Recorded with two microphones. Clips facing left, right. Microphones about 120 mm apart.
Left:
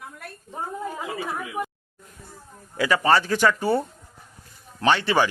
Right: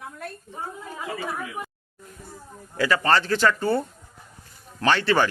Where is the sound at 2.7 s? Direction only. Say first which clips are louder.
Left 1 dB; 15° left (ahead or behind).